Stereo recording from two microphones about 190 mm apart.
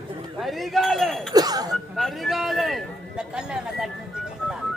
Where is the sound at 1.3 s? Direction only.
20° right (ahead or behind).